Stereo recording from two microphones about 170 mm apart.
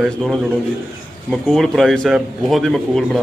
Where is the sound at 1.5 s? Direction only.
Centre (ahead or behind).